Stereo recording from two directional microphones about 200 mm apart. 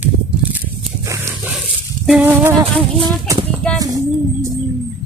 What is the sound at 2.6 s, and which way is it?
Speech, 20° right (ahead or behind).